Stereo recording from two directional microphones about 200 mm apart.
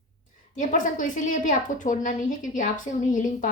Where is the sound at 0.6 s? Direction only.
40° left (ahead or behind).